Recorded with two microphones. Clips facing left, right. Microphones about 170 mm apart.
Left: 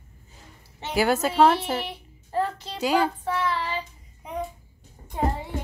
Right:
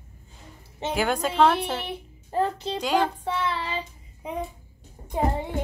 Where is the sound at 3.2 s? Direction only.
25° right (ahead or behind).